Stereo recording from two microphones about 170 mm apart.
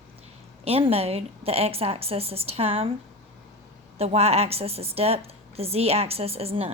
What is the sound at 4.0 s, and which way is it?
A woman's voice, 35° right (ahead or behind).